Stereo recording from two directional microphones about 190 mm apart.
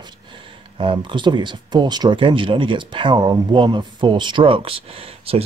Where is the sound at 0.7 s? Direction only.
25° right (ahead or behind).